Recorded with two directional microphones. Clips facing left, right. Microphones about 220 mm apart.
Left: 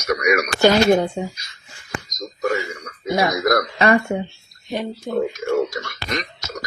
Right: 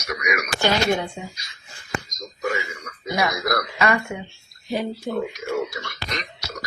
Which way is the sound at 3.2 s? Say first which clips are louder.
Left 5 dB; 35° left (ahead or behind).